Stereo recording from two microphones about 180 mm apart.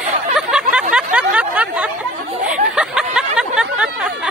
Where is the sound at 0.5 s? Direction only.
5° right (ahead or behind).